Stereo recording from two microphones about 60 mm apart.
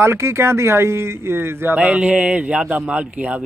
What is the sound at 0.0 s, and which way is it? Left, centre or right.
Speech, right.